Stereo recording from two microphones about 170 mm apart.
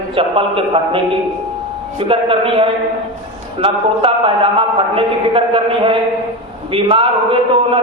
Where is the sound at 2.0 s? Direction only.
30° right (ahead or behind).